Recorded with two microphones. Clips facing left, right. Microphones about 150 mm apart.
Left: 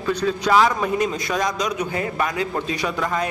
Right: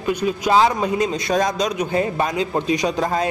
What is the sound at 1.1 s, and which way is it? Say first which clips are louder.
A man's voice: right 4 dB; 35° right (ahead or behind).